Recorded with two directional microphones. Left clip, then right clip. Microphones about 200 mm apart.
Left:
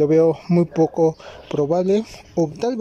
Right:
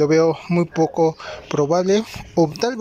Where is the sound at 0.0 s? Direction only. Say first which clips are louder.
Even; 20° left (ahead or behind).